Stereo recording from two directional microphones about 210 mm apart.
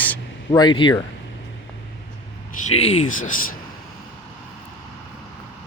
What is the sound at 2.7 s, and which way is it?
Speech, 30° left (ahead or behind).